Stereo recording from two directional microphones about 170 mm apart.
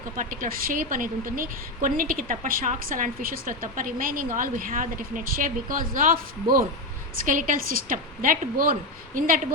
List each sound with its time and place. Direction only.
0.2 s a woman's voice: 55° right (ahead or behind)